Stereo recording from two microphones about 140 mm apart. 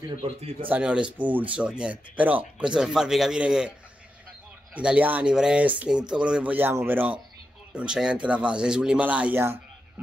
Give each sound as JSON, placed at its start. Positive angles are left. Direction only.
{"t": 0.2, "sound": "speech", "side_deg": -40}
{"t": 0.7, "sound": "speech", "side_deg": -10}
{"t": 4.7, "sound": "speech", "side_deg": -10}